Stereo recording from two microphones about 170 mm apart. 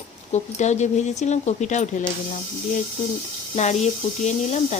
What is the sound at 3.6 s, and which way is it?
Speech, 40° left (ahead or behind).